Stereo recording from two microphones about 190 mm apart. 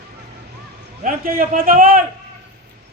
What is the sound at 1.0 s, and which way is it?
A man's voice, 50° right (ahead or behind).